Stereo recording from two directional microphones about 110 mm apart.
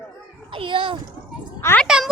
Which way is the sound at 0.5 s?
55° right (ahead or behind).